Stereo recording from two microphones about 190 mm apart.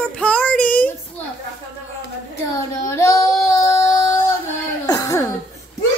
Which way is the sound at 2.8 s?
15° left (ahead or behind).